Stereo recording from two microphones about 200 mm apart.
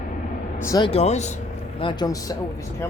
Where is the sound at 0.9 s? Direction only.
35° left (ahead or behind).